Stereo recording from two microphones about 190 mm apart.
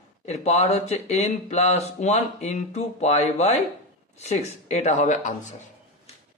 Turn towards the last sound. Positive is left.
turn(degrees=40)  # may be behind; listen again after turning